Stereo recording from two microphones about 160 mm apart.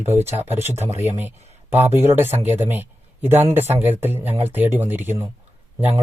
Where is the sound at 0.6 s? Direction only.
15° right (ahead or behind).